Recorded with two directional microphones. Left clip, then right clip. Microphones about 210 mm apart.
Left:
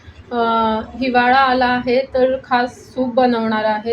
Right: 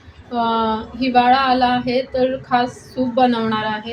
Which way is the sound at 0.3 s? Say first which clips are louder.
Left 2 dB; 5° left (ahead or behind).